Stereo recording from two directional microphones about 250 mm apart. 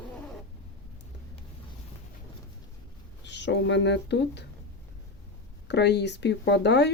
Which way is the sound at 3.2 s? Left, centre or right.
Left.